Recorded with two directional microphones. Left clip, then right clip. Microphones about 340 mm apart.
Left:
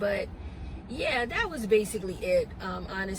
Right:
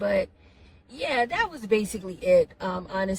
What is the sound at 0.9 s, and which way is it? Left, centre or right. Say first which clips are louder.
Speech: right 3 dB; centre.